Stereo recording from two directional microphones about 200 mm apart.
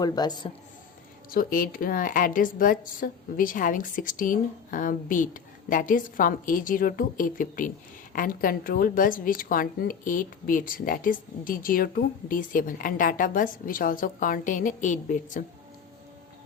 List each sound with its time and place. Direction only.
0.0 s speech: 20° left (ahead or behind)
1.3 s a woman's voice: 45° left (ahead or behind)